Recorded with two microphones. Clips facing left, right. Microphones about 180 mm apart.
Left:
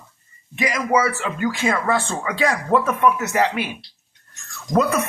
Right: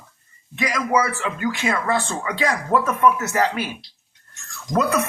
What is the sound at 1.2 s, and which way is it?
Speech, 30° left (ahead or behind).